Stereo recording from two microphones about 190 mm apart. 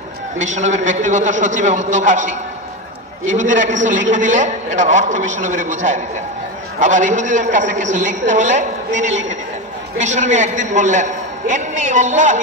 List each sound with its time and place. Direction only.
0.4 s a man's voice: 40° right (ahead or behind)